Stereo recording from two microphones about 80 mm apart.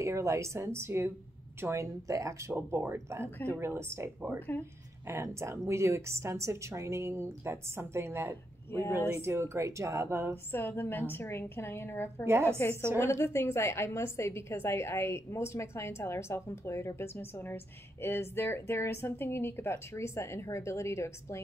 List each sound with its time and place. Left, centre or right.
0.0 s speech: right
10.3 s a woman's voice: left
12.3 s speech: right
13.0 s a woman's voice: left